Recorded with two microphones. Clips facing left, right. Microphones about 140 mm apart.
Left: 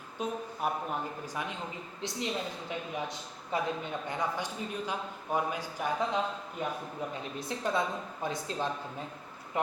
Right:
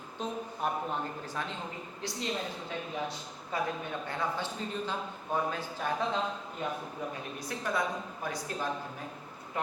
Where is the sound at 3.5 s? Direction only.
25° left (ahead or behind).